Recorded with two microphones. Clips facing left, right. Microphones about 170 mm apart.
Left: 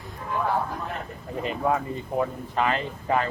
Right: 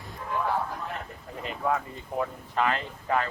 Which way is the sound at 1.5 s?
15° left (ahead or behind).